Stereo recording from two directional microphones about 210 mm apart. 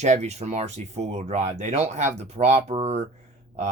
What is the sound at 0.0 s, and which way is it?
Speech, 30° right (ahead or behind).